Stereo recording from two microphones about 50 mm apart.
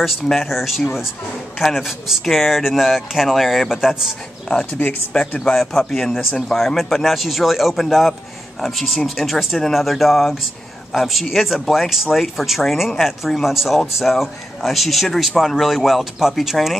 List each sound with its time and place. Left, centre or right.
0.3 s speech: centre
4.8 s speech: left
5.4 s a man's voice: centre